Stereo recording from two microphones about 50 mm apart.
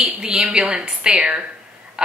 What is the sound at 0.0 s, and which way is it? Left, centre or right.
A woman's voice, centre.